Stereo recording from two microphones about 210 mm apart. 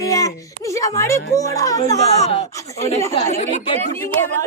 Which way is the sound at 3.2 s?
30° left (ahead or behind).